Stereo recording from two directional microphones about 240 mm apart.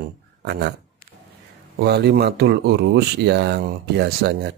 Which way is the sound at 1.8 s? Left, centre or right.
Right.